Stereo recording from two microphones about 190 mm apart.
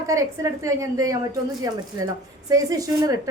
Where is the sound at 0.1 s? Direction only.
15° right (ahead or behind).